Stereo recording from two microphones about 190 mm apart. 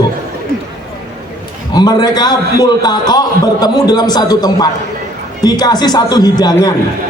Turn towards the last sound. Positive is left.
turn(degrees=20)  # may be behind; listen again after turning